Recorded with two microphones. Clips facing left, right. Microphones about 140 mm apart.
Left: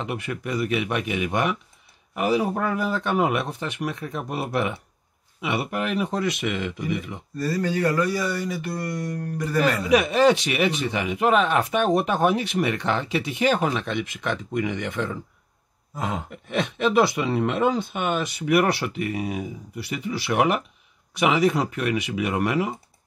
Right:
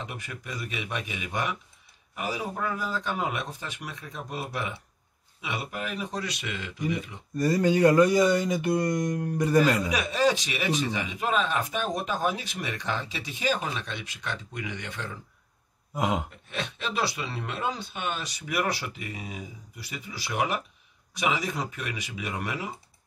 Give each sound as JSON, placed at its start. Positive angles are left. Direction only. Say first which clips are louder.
{"t": 0.0, "sound": "a man's voice", "louder": "left 9 dB", "side_deg": 70}
{"t": 7.3, "sound": "speech", "louder": "right 2 dB", "side_deg": -15}
{"t": 9.6, "sound": "a man's voice", "louder": "left 5 dB", "side_deg": 65}
{"t": 15.9, "sound": "a sound", "louder": "right 2 dB", "side_deg": -15}
{"t": 16.4, "sound": "a man's voice", "louder": "left 10 dB", "side_deg": 60}